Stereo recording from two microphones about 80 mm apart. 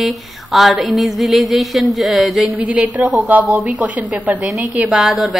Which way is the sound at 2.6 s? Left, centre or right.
Centre.